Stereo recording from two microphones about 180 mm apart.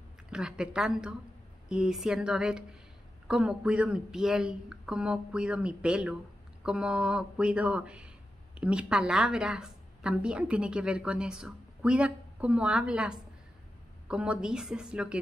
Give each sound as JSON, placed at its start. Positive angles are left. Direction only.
{"t": 0.3, "sound": "a woman's voice", "side_deg": -5}